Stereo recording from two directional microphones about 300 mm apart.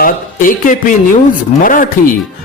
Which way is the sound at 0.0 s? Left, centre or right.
Left.